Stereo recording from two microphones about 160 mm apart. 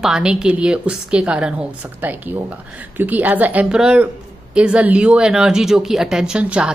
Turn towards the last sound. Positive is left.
turn(degrees=-5)  # may be behind; listen again after turning